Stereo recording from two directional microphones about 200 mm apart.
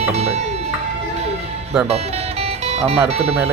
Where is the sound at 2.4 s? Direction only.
30° right (ahead or behind).